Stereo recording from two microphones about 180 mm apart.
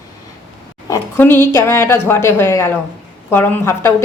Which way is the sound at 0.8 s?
15° left (ahead or behind).